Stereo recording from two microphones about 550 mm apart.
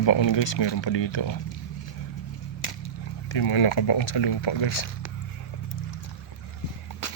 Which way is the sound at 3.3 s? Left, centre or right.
Left.